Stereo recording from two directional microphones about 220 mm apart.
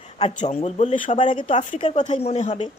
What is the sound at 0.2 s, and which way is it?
A woman's voice, 30° left (ahead or behind).